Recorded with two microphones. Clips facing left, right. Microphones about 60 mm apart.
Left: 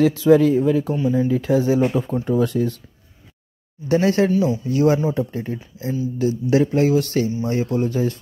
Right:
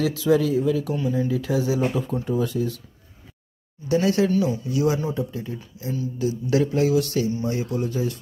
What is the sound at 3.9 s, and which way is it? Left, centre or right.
Speech, left.